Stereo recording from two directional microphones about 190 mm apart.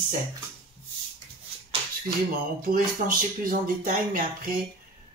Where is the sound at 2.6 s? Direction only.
45° right (ahead or behind).